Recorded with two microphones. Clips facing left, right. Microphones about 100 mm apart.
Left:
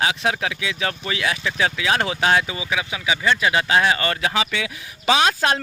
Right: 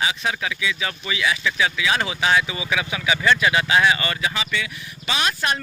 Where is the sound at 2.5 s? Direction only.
20° left (ahead or behind).